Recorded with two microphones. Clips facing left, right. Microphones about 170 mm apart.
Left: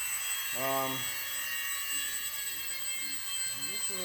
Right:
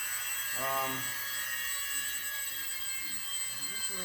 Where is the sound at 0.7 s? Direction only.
25° left (ahead or behind).